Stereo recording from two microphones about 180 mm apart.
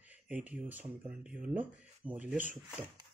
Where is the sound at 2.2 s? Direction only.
10° right (ahead or behind).